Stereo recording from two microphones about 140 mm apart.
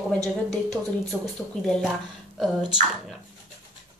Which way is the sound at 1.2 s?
5° left (ahead or behind).